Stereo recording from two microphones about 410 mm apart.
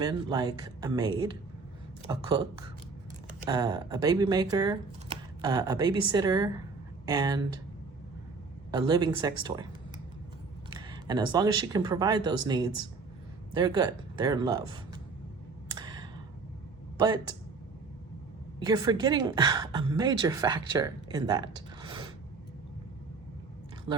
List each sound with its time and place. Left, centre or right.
0.0 s a woman's voice: centre
3.4 s a woman's voice: centre
8.7 s a woman's voice: centre
10.7 s a woman's voice: centre
15.7 s a sound: centre
17.0 s a woman's voice: centre
18.6 s a woman's voice: centre